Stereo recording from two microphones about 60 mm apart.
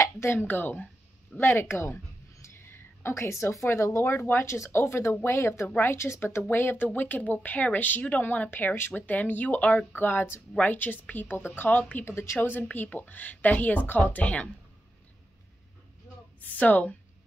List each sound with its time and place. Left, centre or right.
0.0 s a sound: left
0.5 s speech: left
1.4 s speech: left
12.1 s speech: left
12.4 s speech: left
16.3 s speech: left